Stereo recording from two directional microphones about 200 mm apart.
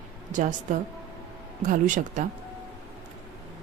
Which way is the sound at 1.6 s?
40° right (ahead or behind).